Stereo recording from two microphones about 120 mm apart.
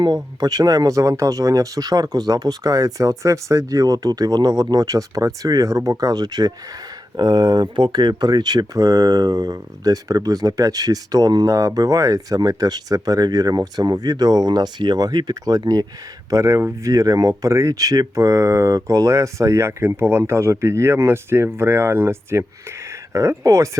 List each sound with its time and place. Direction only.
0.0 s speech: 35° right (ahead or behind)